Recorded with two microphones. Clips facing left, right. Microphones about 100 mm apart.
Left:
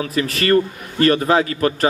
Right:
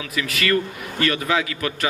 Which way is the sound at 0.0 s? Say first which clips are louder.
Left 5 dB; 40° left (ahead or behind).